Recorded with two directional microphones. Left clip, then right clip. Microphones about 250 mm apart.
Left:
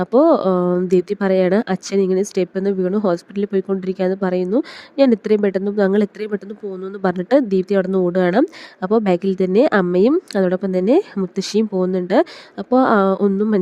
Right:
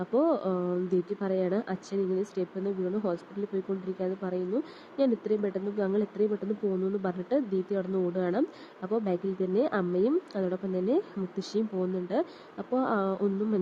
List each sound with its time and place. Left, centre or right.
0.0 s speech: left